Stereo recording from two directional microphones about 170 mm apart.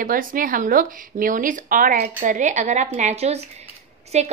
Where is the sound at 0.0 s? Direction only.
55° right (ahead or behind).